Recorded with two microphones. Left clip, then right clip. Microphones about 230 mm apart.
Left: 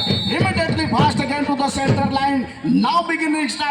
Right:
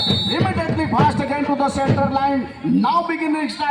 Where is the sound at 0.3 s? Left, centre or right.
Left.